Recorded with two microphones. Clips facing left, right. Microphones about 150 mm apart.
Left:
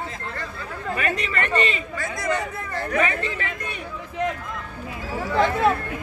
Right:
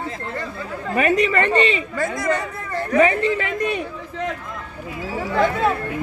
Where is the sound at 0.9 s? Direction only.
25° right (ahead or behind).